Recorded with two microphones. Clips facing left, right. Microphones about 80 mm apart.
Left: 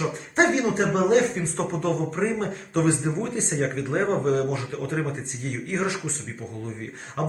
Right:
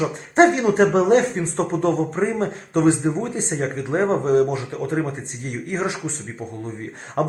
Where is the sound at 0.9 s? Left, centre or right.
Right.